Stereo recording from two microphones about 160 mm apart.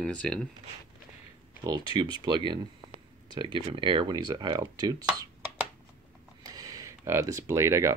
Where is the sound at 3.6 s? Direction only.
30° right (ahead or behind).